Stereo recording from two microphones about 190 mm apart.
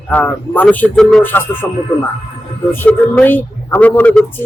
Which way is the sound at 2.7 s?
10° left (ahead or behind).